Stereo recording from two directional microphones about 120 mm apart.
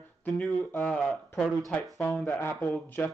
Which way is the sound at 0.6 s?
15° left (ahead or behind).